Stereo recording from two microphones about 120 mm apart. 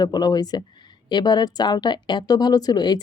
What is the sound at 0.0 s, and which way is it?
Speech, 35° left (ahead or behind).